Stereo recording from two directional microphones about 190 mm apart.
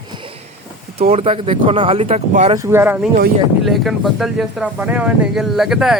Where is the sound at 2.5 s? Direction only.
10° right (ahead or behind).